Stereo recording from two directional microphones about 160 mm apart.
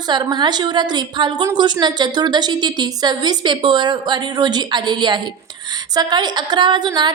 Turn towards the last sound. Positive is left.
turn(degrees=-25)  # may be behind; listen again after turning